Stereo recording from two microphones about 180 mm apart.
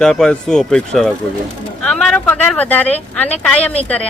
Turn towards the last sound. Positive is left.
turn(degrees=5)  # may be behind; listen again after turning